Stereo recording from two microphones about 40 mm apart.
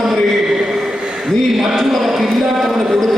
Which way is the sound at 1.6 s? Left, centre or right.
Centre.